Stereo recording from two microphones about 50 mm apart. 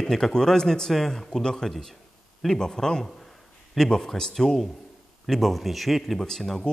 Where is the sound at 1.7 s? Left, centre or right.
Centre.